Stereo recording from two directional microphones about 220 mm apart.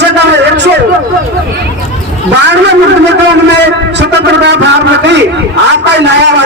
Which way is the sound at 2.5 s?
50° right (ahead or behind).